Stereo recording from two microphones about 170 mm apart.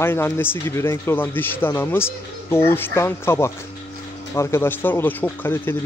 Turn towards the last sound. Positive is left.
turn(degrees=10)  # may be behind; listen again after turning